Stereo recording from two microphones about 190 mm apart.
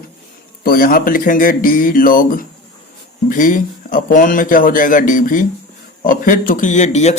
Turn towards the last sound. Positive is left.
turn(degrees=35)  # may be behind; listen again after turning